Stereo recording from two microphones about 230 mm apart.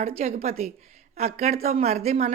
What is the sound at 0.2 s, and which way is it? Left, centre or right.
A woman's voice, right.